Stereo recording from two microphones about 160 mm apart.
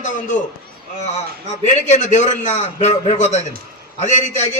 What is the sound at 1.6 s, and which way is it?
A man's voice, 45° left (ahead or behind).